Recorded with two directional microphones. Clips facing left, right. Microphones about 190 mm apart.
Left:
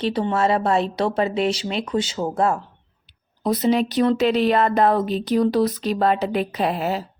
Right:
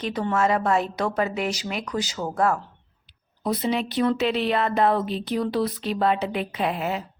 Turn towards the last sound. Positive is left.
turn(degrees=35)  # may be behind; listen again after turning